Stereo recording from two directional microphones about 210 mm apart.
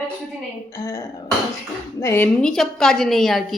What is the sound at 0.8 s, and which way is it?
A woman's voice, 15° left (ahead or behind).